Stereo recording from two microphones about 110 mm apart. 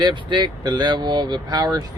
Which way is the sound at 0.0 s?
45° right (ahead or behind).